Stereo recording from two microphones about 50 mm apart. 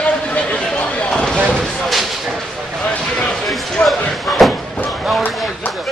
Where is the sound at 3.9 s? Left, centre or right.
Centre.